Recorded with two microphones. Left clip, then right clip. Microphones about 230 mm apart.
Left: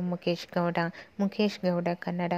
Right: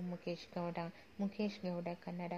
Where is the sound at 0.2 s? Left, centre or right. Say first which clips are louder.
Left 14 dB; left.